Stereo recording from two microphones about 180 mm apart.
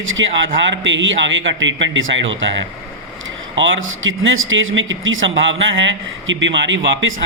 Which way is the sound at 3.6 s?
90° right.